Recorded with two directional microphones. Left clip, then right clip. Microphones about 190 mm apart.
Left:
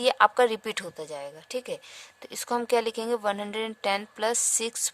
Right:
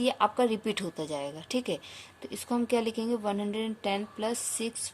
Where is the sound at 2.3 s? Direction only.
55° left (ahead or behind).